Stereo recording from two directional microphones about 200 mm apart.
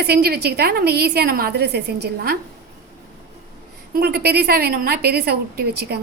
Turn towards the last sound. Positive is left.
turn(degrees=-50)  # may be behind; listen again after turning